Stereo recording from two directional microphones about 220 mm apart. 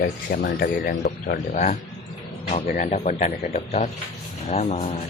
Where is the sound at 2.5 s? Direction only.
30° left (ahead or behind).